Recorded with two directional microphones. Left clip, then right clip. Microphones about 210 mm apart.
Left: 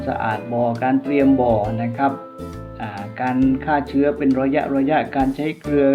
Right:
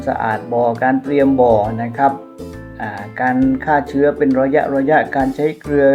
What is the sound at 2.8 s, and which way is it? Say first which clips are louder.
Music: right 6 dB; 15° right (ahead or behind).